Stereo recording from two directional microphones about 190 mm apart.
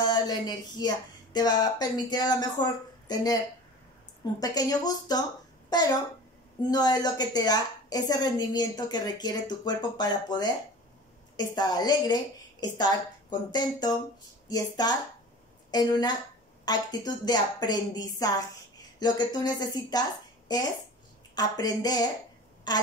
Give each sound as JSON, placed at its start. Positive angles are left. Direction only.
{"t": 0.0, "sound": "a woman's voice", "side_deg": 20}
{"t": 4.4, "sound": "a woman's voice", "side_deg": 20}